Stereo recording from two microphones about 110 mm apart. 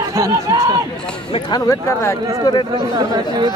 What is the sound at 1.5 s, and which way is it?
Speech, 35° left (ahead or behind).